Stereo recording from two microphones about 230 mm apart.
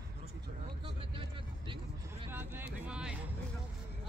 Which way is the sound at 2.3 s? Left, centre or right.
Centre.